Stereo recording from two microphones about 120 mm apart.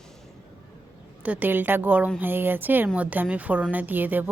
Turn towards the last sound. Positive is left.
turn(degrees=-15)  # may be behind; listen again after turning